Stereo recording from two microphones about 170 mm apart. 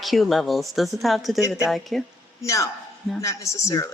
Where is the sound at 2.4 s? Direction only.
15° left (ahead or behind).